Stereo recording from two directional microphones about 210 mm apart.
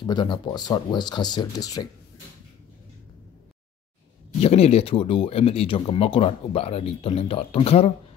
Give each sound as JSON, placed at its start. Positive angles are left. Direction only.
{"t": 0.0, "sound": "speech", "side_deg": 20}
{"t": 4.4, "sound": "speech", "side_deg": 30}